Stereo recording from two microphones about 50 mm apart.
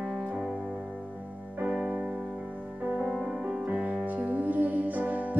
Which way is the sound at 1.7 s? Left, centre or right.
Centre.